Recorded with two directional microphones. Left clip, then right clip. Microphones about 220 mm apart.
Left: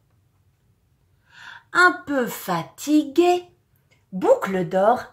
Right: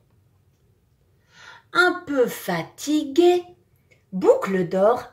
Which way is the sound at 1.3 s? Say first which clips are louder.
Left 2 dB; 20° left (ahead or behind).